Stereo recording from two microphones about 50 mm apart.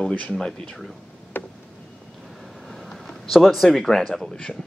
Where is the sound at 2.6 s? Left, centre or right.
Centre.